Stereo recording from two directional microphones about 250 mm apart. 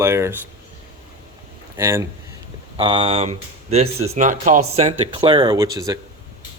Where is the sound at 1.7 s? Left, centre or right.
Centre.